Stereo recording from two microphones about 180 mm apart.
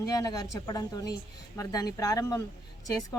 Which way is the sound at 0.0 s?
20° left (ahead or behind).